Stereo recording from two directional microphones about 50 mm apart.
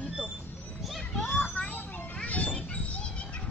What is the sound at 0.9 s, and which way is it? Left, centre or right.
Children playing, centre.